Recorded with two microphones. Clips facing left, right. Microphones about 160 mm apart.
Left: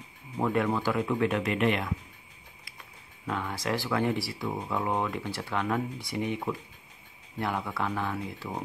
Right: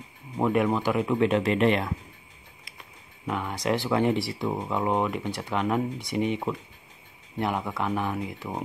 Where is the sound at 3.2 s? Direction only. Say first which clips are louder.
Right 3 dB; 15° right (ahead or behind).